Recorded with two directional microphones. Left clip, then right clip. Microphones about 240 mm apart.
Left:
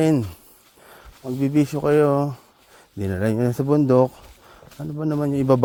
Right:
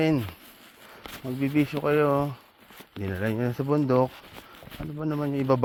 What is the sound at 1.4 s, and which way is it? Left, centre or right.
Speech, left.